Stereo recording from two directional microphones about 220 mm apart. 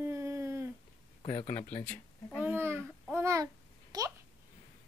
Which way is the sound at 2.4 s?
10° right (ahead or behind).